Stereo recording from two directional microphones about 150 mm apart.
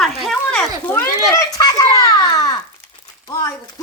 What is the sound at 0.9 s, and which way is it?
A child's voice, 15° left (ahead or behind).